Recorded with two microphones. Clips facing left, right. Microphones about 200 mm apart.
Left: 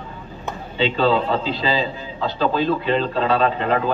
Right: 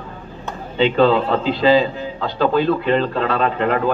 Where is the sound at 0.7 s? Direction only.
50° right (ahead or behind).